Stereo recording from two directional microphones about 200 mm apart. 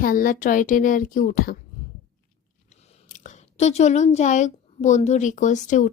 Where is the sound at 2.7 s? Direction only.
40° left (ahead or behind).